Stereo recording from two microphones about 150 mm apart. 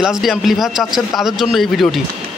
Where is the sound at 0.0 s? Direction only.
Centre (ahead or behind).